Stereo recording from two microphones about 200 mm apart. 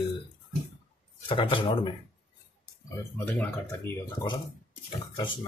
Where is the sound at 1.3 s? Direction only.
25° left (ahead or behind).